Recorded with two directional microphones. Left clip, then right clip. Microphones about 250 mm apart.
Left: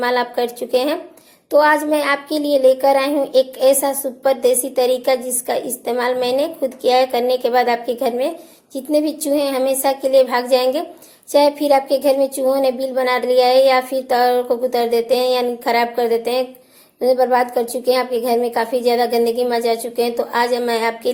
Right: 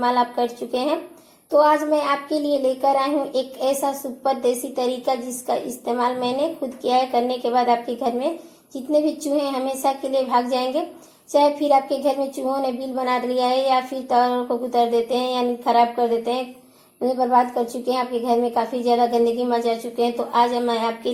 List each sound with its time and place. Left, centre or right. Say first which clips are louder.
0.0 s a woman's voice: left 2 dB; left